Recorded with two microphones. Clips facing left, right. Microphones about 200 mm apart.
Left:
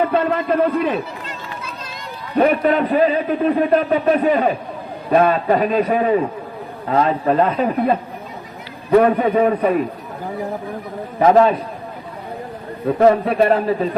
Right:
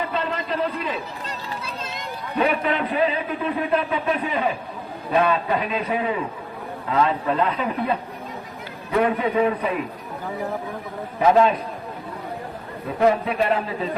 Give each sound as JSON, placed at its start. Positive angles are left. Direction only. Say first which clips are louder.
{"t": 0.0, "sound": "a man's voice", "louder": "left 9 dB", "side_deg": 50}
{"t": 1.6, "sound": "run", "louder": "even", "side_deg": -25}
{"t": 2.3, "sound": "a man's voice", "louder": "left 7 dB", "side_deg": 45}
{"t": 9.0, "sound": "a man's voice", "louder": "left 5 dB", "side_deg": 40}
{"t": 11.2, "sound": "a man's voice", "louder": "left 4 dB", "side_deg": 40}
{"t": 13.0, "sound": "a man's voice", "louder": "left 5 dB", "side_deg": 45}